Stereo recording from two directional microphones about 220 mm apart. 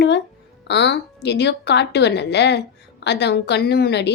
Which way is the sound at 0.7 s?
55° left (ahead or behind).